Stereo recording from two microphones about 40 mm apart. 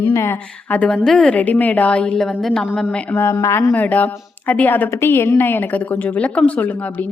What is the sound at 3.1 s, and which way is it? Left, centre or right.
Speech, left.